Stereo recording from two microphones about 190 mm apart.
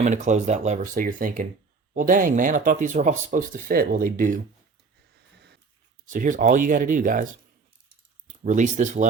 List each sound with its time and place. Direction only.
0.0 s speech: 40° right (ahead or behind)
6.1 s speech: 45° right (ahead or behind)
8.3 s speech: 40° right (ahead or behind)